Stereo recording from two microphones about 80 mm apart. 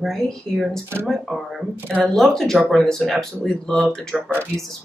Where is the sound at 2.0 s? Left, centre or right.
Centre.